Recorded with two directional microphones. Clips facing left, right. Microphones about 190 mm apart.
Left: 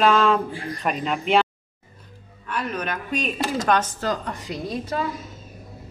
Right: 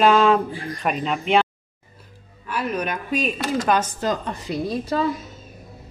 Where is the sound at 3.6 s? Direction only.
15° right (ahead or behind).